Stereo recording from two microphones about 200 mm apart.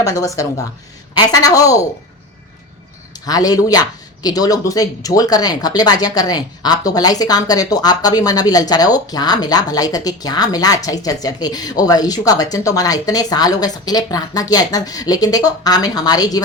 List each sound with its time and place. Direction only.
0.0 s a woman's voice: 15° left (ahead or behind)
3.2 s speech: 20° left (ahead or behind)